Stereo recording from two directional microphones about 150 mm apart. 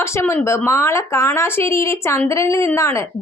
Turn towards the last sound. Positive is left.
turn(degrees=20)  # may be behind; listen again after turning